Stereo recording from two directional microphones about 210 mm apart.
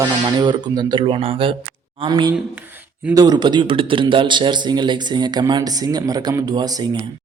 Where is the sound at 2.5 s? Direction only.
10° right (ahead or behind).